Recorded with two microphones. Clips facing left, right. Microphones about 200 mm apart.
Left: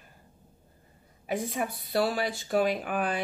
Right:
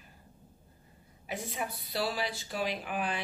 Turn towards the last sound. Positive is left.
turn(degrees=50)  # may be behind; listen again after turning